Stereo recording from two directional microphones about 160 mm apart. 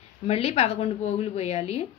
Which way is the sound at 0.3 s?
40° left (ahead or behind).